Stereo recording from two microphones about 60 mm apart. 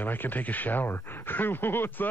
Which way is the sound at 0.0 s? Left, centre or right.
Left.